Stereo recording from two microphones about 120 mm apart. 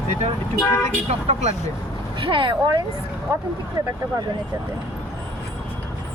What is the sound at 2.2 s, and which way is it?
Speech, 45° right (ahead or behind).